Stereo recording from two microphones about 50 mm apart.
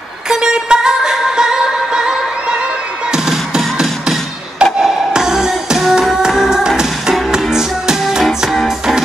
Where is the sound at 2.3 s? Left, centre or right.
Right.